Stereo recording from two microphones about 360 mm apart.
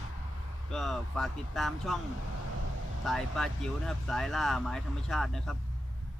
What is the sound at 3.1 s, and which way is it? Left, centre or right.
Speech, centre.